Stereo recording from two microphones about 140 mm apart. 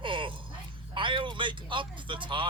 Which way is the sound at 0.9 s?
35° right (ahead or behind).